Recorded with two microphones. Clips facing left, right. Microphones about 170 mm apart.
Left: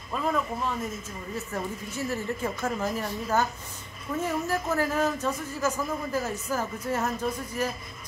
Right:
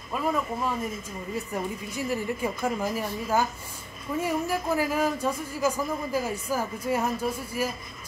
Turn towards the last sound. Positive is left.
turn(degrees=-10)  # may be behind; listen again after turning